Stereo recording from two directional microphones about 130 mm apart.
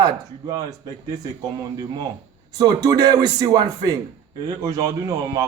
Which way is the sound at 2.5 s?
30° right (ahead or behind).